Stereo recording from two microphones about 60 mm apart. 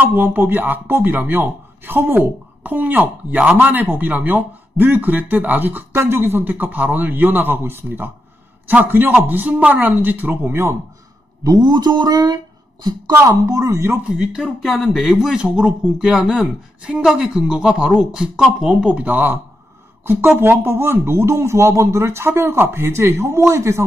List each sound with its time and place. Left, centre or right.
0.0 s a man's voice: right
5.9 s a man's voice: right
10.5 s speech: right
11.4 s speech: right
13.3 s speech: right
14.1 s a woman's voice: centre; by 20.2 s right
20.2 s speech: right